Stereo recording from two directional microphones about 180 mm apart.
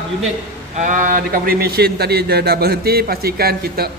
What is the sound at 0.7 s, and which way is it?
A man's voice, 45° right (ahead or behind).